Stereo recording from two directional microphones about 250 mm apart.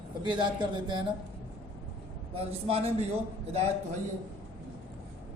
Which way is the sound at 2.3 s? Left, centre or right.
Right.